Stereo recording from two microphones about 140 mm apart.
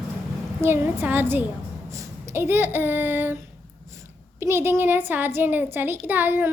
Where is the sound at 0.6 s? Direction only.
15° right (ahead or behind).